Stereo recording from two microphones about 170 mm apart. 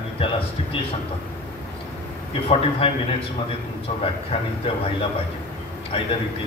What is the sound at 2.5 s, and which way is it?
Speech, 35° left (ahead or behind).